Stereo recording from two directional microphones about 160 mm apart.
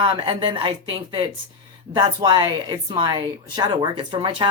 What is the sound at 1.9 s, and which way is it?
Speech, 30° right (ahead or behind).